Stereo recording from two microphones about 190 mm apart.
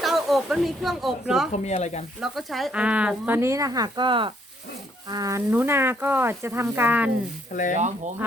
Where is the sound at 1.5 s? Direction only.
35° left (ahead or behind).